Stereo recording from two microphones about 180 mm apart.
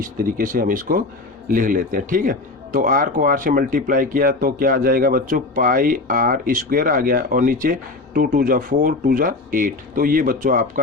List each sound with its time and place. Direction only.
0.0 s speech: 50° right (ahead or behind)